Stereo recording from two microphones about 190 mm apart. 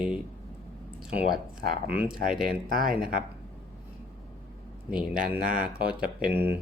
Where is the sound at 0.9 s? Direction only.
Centre (ahead or behind).